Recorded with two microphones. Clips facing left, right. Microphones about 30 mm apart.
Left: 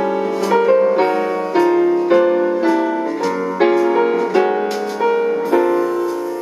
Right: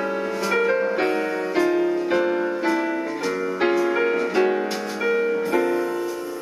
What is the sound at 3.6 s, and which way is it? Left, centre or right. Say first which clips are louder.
Music: left 7 dB; left.